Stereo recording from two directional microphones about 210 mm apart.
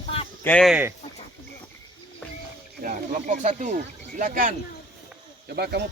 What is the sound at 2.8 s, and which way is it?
Speech, 35° right (ahead or behind).